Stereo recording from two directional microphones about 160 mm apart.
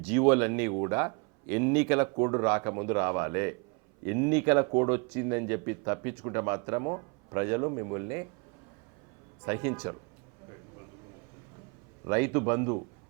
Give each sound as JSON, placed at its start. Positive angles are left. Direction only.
{"t": 0.1, "sound": "speech", "side_deg": -15}
{"t": 9.5, "sound": "speech", "side_deg": -15}
{"t": 12.0, "sound": "speech", "side_deg": -15}